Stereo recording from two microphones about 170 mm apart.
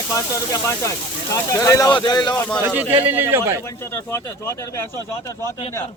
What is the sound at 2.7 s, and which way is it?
Speech, 10° right (ahead or behind).